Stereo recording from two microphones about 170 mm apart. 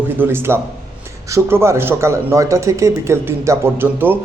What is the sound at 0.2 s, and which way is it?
A man's voice, 15° right (ahead or behind).